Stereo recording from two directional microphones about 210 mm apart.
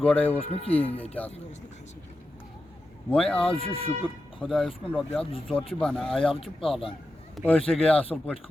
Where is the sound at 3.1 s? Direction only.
5° left (ahead or behind).